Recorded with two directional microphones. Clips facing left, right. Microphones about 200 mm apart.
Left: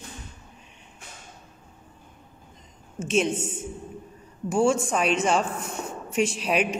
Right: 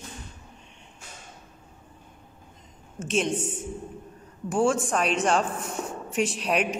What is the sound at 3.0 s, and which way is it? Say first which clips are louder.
Speech: left 2 dB; centre (ahead or behind).